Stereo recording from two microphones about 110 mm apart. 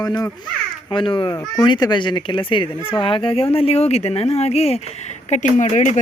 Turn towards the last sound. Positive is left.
turn(degrees=90)